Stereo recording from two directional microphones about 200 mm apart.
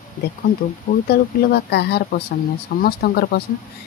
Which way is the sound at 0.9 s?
50° left (ahead or behind).